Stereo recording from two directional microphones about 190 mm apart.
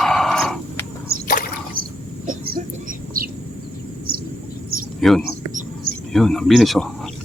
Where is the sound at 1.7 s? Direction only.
50° right (ahead or behind).